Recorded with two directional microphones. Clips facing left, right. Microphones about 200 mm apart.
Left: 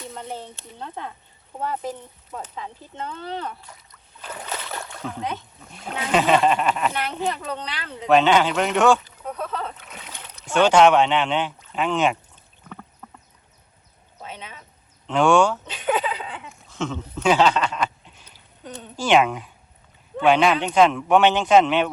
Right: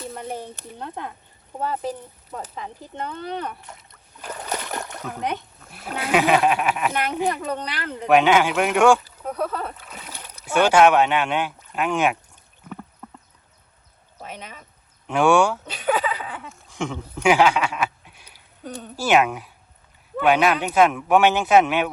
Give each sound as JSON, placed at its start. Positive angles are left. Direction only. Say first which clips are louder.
{"t": 0.3, "sound": "speech", "louder": "right 3 dB", "side_deg": -15}
{"t": 3.2, "sound": "speech", "louder": "right 1 dB", "side_deg": -20}
{"t": 4.4, "sound": "a sound", "louder": "right 4 dB", "side_deg": -45}
{"t": 5.3, "sound": "speech", "louder": "right 3 dB", "side_deg": -5}
{"t": 14.3, "sound": "speech", "louder": "right 1 dB", "side_deg": -10}